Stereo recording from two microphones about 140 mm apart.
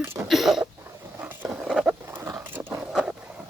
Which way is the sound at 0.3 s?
Centre (ahead or behind).